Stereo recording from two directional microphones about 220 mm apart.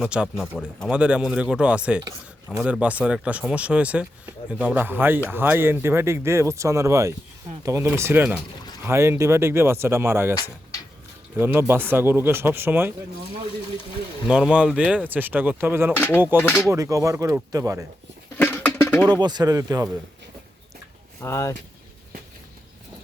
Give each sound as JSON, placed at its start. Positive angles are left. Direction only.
{"t": 0.0, "sound": "speech", "side_deg": -5}
{"t": 11.3, "sound": "speech", "side_deg": -10}
{"t": 14.3, "sound": "speech", "side_deg": -5}
{"t": 16.0, "sound": "speech", "side_deg": 10}
{"t": 16.6, "sound": "speech", "side_deg": -15}
{"t": 18.3, "sound": "a sound", "side_deg": 10}
{"t": 19.0, "sound": "speech", "side_deg": -20}
{"t": 21.2, "sound": "speech", "side_deg": 10}